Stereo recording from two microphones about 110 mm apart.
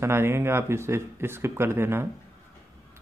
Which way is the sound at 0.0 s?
25° right (ahead or behind).